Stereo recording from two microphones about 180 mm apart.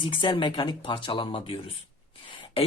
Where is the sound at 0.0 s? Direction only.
25° left (ahead or behind).